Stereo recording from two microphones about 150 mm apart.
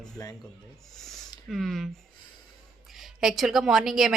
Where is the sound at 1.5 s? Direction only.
Centre (ahead or behind).